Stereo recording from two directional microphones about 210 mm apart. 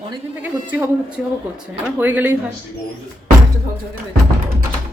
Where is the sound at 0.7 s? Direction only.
5° right (ahead or behind).